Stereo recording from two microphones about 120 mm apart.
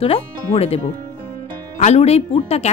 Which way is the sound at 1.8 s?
65° left (ahead or behind).